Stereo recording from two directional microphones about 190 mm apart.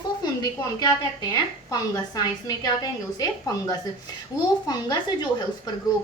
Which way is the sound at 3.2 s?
20° left (ahead or behind).